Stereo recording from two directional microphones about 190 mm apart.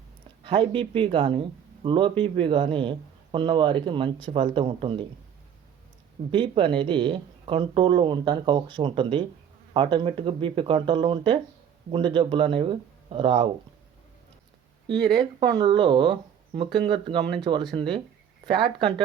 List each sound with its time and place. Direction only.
0.4 s speech: 25° right (ahead or behind)
6.3 s speech: 25° right (ahead or behind)
15.0 s speech: 25° right (ahead or behind)